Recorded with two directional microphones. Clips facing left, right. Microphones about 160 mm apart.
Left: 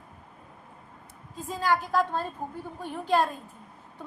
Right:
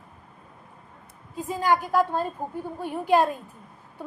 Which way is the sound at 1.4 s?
15° right (ahead or behind).